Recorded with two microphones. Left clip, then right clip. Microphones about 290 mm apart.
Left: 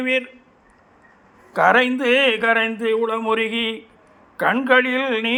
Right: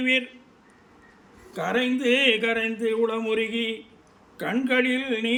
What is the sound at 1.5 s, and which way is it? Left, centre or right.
Speech, left.